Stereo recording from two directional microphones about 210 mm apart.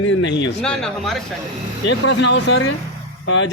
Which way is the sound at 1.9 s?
55° left (ahead or behind).